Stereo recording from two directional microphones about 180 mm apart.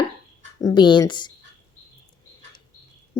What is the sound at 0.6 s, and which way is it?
Speech, 25° left (ahead or behind).